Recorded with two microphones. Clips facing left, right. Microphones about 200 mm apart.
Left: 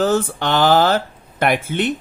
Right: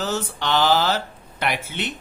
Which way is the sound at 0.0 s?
50° left (ahead or behind).